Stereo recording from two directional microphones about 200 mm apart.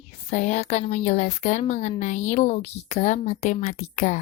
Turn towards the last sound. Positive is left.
turn(degrees=40)  # may be behind; listen again after turning